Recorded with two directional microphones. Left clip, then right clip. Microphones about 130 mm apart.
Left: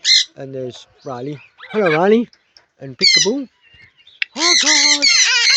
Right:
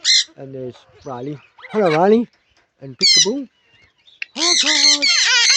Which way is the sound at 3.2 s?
45° left (ahead or behind).